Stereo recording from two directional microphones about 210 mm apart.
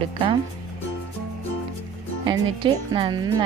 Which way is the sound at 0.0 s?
25° right (ahead or behind).